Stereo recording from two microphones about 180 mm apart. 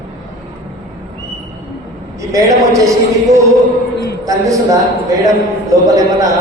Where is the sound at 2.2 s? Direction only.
20° right (ahead or behind).